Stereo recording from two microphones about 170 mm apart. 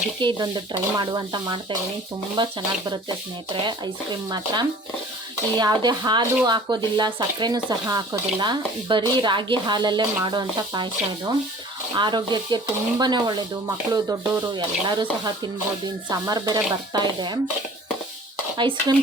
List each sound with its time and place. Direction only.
0.2 s speech: 25° right (ahead or behind)
11.9 s speech: 25° right (ahead or behind)
16.0 s speech: 25° right (ahead or behind)
18.5 s speech: 25° right (ahead or behind)